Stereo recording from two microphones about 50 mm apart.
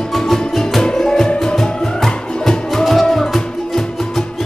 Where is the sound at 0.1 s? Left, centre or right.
Centre.